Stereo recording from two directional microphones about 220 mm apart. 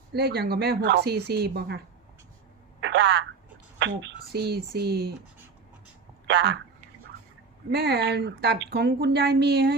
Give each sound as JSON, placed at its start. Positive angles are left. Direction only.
{"t": 0.1, "sound": "speech", "side_deg": -45}
{"t": 2.8, "sound": "telephone", "side_deg": -50}
{"t": 3.8, "sound": "speech", "side_deg": -55}
{"t": 6.2, "sound": "a woman's voice", "side_deg": -50}
{"t": 7.7, "sound": "speech", "side_deg": -45}